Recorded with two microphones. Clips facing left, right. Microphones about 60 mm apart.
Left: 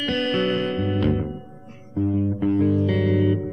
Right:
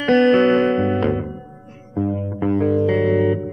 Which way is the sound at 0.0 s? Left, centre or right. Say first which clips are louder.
Right 9 dB; right.